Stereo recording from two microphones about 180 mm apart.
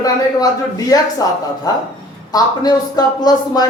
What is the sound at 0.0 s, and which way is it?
A man's voice, 20° left (ahead or behind).